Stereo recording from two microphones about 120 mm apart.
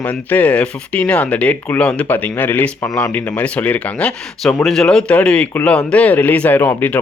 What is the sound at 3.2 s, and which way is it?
Speech, 15° left (ahead or behind).